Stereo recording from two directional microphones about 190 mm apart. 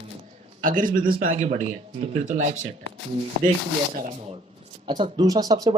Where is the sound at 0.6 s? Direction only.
45° right (ahead or behind).